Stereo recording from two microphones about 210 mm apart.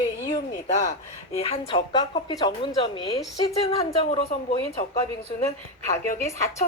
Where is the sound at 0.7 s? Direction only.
35° left (ahead or behind).